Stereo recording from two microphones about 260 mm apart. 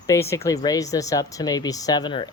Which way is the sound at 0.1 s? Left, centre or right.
Centre.